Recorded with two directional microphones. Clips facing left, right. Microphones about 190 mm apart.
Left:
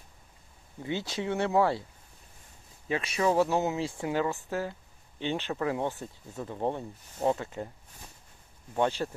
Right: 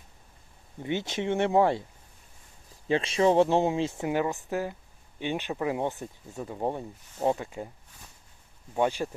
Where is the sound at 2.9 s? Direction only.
30° right (ahead or behind).